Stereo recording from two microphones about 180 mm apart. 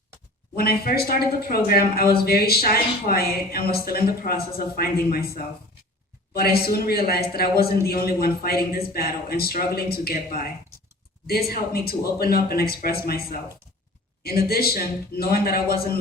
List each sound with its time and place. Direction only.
0.5 s a man's voice: 60° left (ahead or behind)